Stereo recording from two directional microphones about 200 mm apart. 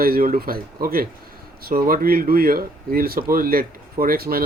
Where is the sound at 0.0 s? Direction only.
45° right (ahead or behind).